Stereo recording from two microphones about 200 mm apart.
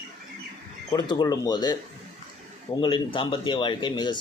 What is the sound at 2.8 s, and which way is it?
Speech, 25° left (ahead or behind).